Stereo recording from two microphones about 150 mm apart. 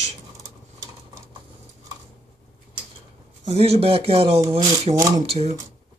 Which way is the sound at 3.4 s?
45° right (ahead or behind).